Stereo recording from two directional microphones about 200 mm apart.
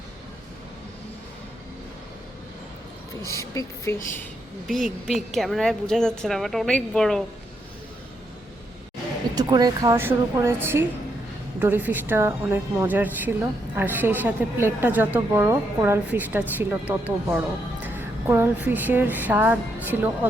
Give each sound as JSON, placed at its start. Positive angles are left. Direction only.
{"t": 3.2, "sound": "a woman's voice", "side_deg": 15}
{"t": 4.7, "sound": "speech", "side_deg": 0}
{"t": 9.3, "sound": "speech", "side_deg": -20}
{"t": 17.8, "sound": "music", "side_deg": -10}